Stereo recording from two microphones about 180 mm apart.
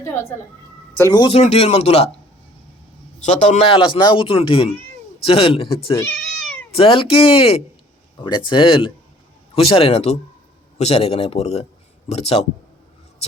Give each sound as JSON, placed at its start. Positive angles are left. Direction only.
{"t": 0.0, "sound": "speech", "side_deg": 15}
{"t": 1.4, "sound": "speech", "side_deg": 35}
{"t": 3.2, "sound": "speech", "side_deg": 40}
{"t": 5.9, "sound": "cat", "side_deg": 15}
{"t": 6.7, "sound": "speech", "side_deg": 30}